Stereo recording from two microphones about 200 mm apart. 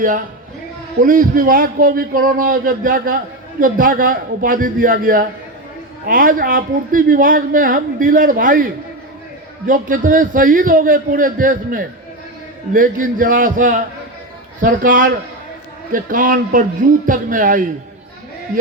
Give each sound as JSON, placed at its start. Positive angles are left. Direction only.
{"t": 1.0, "sound": "speech", "side_deg": -45}